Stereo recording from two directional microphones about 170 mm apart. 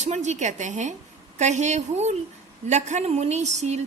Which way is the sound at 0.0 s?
45° right (ahead or behind).